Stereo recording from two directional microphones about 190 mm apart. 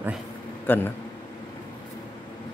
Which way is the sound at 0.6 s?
10° left (ahead or behind).